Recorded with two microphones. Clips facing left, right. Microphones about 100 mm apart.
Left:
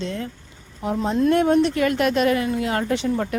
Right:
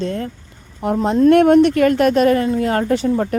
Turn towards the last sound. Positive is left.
turn(degrees=-40)  # may be behind; listen again after turning